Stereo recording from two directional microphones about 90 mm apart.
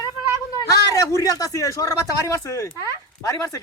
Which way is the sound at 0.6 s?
40° left (ahead or behind).